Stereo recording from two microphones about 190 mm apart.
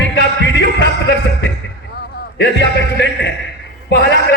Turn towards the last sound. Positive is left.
turn(degrees=65)  # may be behind; listen again after turning